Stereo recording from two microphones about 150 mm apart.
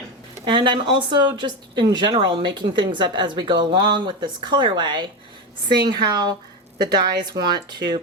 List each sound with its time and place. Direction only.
0.4 s speech: 30° right (ahead or behind)